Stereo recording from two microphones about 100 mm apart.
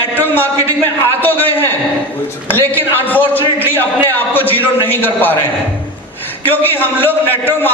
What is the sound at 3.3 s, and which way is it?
Speech, 20° right (ahead or behind).